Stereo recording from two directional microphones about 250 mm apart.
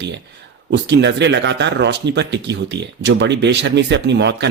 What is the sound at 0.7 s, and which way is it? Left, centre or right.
A man's voice, right.